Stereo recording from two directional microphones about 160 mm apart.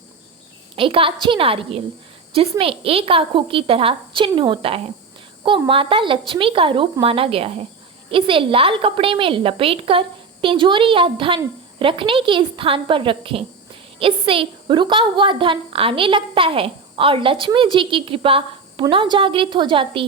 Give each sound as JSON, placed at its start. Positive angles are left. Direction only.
{"t": 0.8, "sound": "a woman's voice", "side_deg": -35}